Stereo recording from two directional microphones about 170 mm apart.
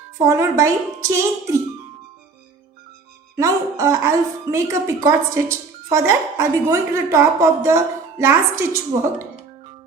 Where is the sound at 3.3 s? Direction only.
20° right (ahead or behind).